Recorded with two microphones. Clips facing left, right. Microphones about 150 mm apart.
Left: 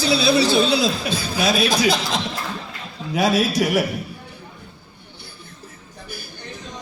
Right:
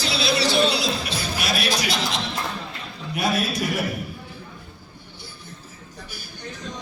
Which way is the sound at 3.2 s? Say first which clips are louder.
Left 5 dB; 90° left.